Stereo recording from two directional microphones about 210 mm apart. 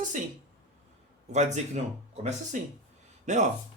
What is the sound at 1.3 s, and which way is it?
Speech, 35° right (ahead or behind).